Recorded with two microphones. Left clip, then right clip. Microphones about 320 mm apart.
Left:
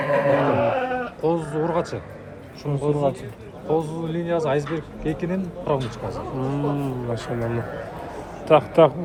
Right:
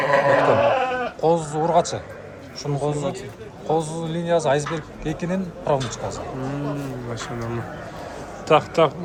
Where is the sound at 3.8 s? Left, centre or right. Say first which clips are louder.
Even; centre.